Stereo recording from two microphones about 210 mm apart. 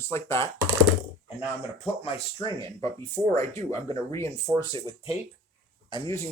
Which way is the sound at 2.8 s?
15° left (ahead or behind).